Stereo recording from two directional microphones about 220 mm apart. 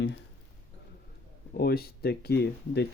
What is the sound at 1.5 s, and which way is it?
Speech, 45° left (ahead or behind).